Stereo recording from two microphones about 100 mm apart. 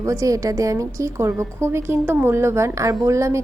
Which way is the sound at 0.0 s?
35° right (ahead or behind).